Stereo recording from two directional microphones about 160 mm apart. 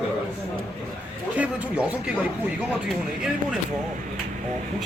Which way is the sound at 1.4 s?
10° right (ahead or behind).